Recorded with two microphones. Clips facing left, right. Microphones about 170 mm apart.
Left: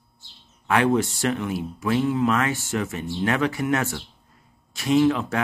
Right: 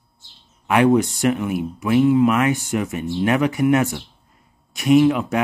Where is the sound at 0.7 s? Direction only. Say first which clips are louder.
Right 5 dB; 15° right (ahead or behind).